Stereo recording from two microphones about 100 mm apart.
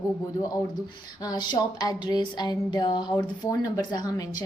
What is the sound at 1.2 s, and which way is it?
A woman's voice, 40° left (ahead or behind).